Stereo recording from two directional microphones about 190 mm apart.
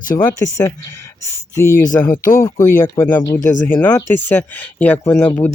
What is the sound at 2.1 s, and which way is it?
Speech, 45° left (ahead or behind).